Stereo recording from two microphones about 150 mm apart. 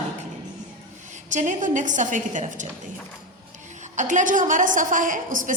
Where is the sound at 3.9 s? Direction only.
55° right (ahead or behind).